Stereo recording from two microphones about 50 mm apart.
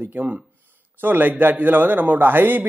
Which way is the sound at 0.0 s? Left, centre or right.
Right.